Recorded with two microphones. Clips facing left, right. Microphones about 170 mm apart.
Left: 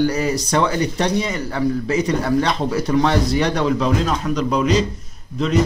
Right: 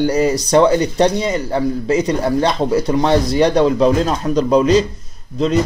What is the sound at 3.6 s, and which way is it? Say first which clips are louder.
A man's voice: right 5 dB; 35° right (ahead or behind).